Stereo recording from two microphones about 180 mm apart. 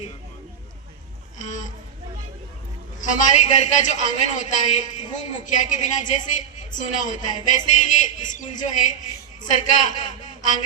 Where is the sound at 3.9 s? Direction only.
45° left (ahead or behind).